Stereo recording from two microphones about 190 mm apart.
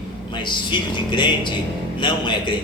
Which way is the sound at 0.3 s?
25° left (ahead or behind).